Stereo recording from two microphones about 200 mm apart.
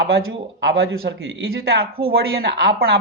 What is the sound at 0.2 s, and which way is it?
Speech, 60° right (ahead or behind).